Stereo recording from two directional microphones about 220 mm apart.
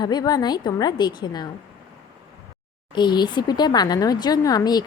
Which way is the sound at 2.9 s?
20° left (ahead or behind).